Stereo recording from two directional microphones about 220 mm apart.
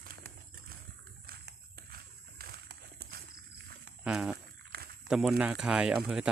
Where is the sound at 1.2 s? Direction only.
45° right (ahead or behind).